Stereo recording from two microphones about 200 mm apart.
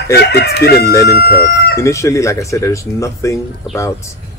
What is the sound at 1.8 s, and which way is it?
Speech, 15° left (ahead or behind).